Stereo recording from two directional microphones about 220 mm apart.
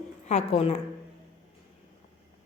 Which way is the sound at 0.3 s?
30° left (ahead or behind).